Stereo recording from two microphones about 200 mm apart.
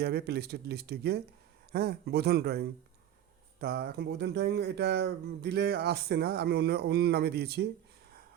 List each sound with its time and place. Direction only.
0.0 s speech: 55° right (ahead or behind)